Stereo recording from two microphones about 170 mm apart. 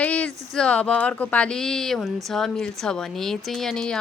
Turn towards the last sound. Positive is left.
turn(degrees=5)  # may be behind; listen again after turning